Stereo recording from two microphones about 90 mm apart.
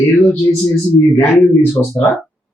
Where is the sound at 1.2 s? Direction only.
25° left (ahead or behind).